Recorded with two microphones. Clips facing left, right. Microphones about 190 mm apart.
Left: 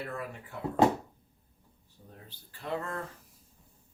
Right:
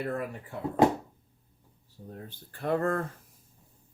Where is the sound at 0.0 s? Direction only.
45° right (ahead or behind).